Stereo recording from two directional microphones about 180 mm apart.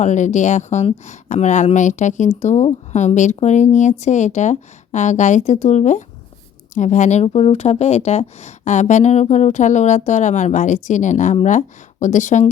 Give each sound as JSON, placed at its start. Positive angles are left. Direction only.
{"t": 0.0, "sound": "speech", "side_deg": 40}